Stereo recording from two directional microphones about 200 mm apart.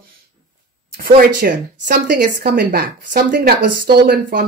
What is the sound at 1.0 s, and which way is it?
Speech, 45° right (ahead or behind).